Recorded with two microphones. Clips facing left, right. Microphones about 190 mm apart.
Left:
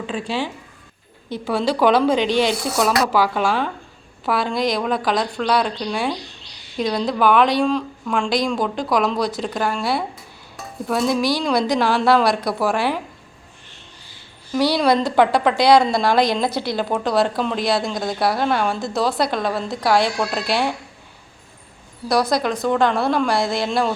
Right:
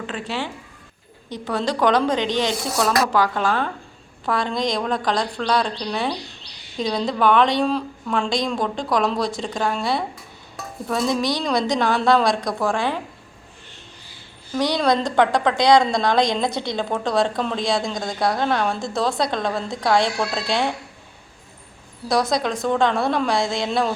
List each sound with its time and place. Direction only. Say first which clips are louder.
0.1 s a woman's voice: left 5 dB; 10° left (ahead or behind)
14.5 s a woman's voice: left 3 dB; 5° left (ahead or behind)
22.1 s a woman's voice: left 2 dB; centre (ahead or behind)